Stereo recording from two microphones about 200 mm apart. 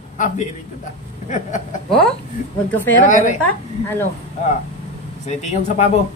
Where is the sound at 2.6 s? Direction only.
10° left (ahead or behind).